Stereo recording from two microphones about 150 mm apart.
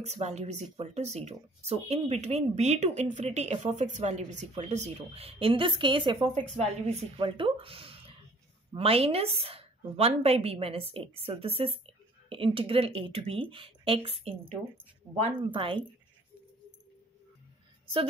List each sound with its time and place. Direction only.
0.0 s speech: 50° right (ahead or behind); by 6.2 s 30° right (ahead or behind)
6.5 s speech: 45° right (ahead or behind)
7.2 s a woman's voice: 35° right (ahead or behind)